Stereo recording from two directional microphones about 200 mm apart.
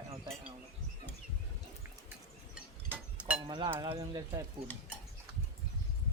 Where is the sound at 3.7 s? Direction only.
20° right (ahead or behind).